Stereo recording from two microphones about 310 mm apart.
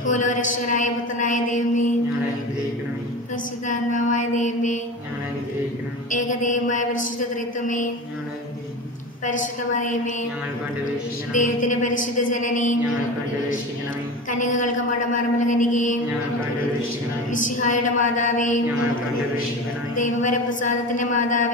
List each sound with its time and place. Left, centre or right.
0.0 s a woman's voice: left
3.6 s a woman's voice: left
6.1 s a woman's voice: left
9.2 s a woman's voice: left
11.3 s a woman's voice: left
14.4 s a woman's voice: left
17.3 s a woman's voice: left
20.0 s a woman's voice: left